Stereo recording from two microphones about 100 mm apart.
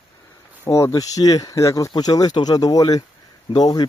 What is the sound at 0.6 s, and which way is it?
Speech, 30° left (ahead or behind).